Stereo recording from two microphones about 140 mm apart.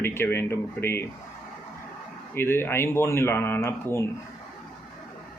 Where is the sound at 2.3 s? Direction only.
15° left (ahead or behind).